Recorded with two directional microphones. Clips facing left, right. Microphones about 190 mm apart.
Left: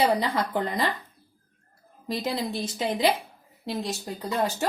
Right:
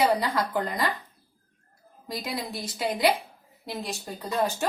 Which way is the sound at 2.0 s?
25° left (ahead or behind).